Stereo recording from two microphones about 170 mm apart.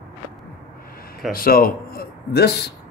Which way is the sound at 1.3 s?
60° left (ahead or behind).